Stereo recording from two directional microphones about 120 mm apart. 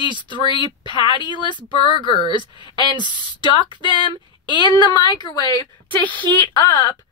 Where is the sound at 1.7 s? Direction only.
45° left (ahead or behind).